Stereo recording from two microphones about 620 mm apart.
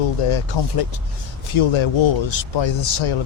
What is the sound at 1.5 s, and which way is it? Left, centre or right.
A man's voice, left.